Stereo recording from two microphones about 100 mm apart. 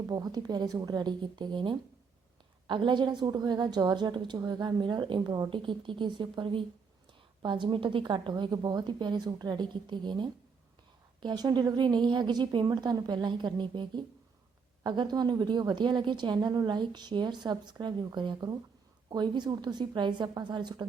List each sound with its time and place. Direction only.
0.1 s a woman's voice: 40° right (ahead or behind)